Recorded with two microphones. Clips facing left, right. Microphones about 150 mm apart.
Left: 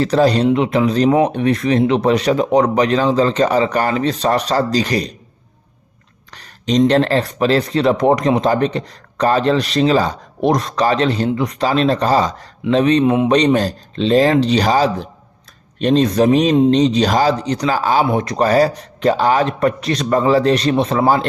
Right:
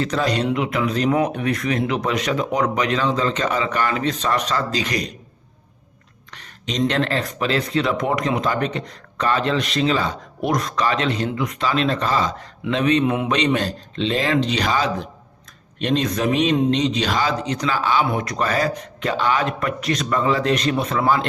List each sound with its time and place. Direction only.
0.0 s speech: 35° left (ahead or behind)
6.3 s speech: 35° left (ahead or behind)